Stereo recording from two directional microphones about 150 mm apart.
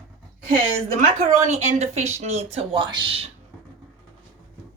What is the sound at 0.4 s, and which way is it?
A woman's voice, 60° right (ahead or behind).